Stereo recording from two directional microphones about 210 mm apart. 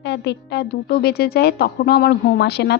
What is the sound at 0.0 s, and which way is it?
A woman's voice, 55° left (ahead or behind).